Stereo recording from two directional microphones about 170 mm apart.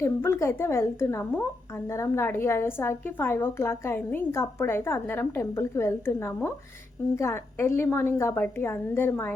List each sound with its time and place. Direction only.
0.0 s a woman's voice: 15° left (ahead or behind)